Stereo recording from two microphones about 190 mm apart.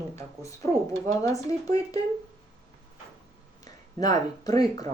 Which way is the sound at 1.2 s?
15° left (ahead or behind).